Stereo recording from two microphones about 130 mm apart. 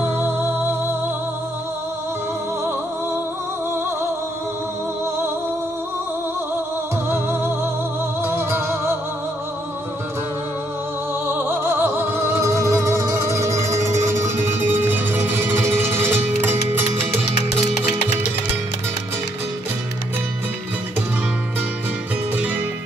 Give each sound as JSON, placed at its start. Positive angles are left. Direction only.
{"t": 0.0, "sound": "music", "side_deg": -20}
{"t": 7.1, "sound": "music", "side_deg": -15}
{"t": 11.2, "sound": "music", "side_deg": -15}
{"t": 17.2, "sound": "music", "side_deg": 55}